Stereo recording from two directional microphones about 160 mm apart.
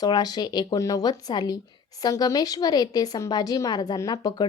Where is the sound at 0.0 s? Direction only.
25° left (ahead or behind).